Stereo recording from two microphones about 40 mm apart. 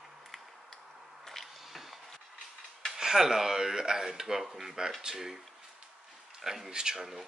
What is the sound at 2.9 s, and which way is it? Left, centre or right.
Speech, centre.